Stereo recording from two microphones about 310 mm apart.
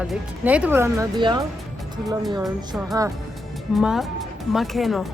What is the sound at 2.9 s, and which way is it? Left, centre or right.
Speech, centre.